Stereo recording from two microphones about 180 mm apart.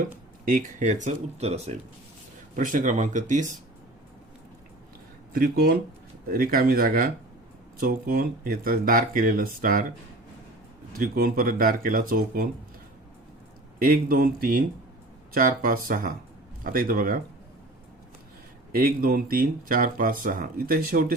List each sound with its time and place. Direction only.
0.0 s speech: 45° right (ahead or behind)
2.6 s speech: 45° right (ahead or behind)
5.3 s speech: 55° right (ahead or behind)
10.9 s speech: 55° right (ahead or behind)
13.7 s speech: 50° right (ahead or behind)
18.7 s speech: 55° right (ahead or behind)